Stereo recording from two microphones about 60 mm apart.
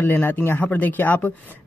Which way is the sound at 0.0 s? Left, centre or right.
Left.